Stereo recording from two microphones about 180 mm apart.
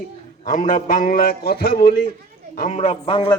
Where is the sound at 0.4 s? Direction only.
45° left (ahead or behind).